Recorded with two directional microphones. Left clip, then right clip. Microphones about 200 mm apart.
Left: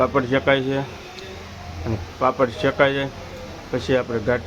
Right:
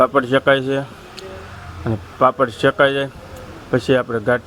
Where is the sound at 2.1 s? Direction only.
30° right (ahead or behind).